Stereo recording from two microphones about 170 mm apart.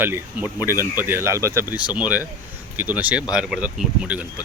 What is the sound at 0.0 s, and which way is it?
Speech, 10° right (ahead or behind).